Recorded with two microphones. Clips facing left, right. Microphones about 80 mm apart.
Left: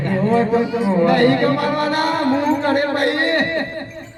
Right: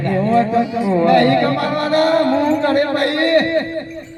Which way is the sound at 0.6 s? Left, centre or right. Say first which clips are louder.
Right 1 dB; left.